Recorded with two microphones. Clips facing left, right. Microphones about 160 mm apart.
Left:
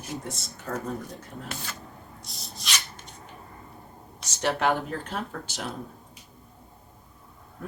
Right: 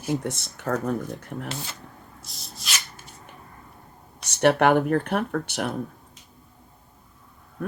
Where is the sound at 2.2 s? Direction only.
Centre (ahead or behind).